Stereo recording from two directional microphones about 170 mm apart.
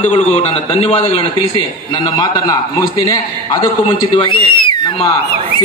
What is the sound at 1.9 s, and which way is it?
A man's voice, 25° left (ahead or behind).